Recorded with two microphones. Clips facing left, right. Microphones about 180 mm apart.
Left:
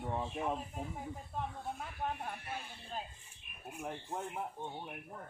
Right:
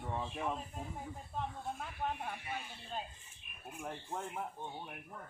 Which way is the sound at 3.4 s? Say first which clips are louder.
Left 2 dB; 5° left (ahead or behind).